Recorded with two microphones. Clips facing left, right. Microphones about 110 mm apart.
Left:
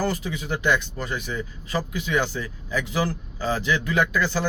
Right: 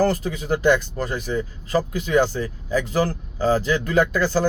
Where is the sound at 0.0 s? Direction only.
45° right (ahead or behind).